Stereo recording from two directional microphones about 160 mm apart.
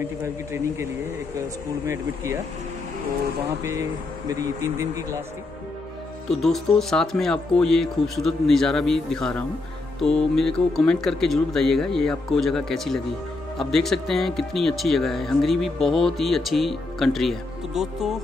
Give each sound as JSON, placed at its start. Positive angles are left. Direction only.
{"t": 0.0, "sound": "a man's voice", "side_deg": -15}
{"t": 4.3, "sound": "speech", "side_deg": -20}
{"t": 6.3, "sound": "speech", "side_deg": 0}